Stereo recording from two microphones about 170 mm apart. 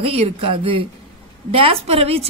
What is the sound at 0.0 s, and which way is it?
A woman's voice, 35° right (ahead or behind).